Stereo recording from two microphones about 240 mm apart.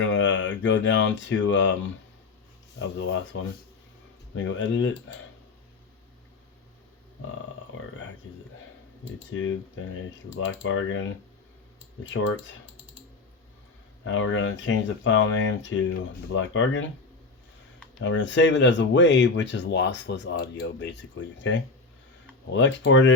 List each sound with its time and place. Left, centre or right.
0.0 s speech: left
4.4 s speech: left
9.3 s speech: left
12.1 s speech: left
14.0 s speech: left
18.0 s speech: left